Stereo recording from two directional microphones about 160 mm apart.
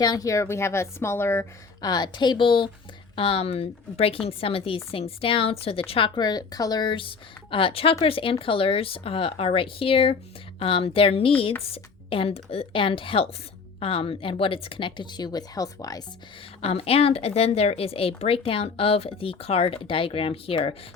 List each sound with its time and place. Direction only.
0.0 s a woman's voice: 25° left (ahead or behind)
16.6 s a woman's voice: 40° left (ahead or behind)